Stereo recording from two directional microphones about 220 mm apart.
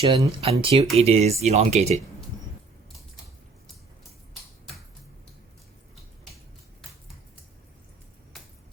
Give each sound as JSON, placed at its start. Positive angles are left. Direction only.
{"t": 0.0, "sound": "speech", "side_deg": -20}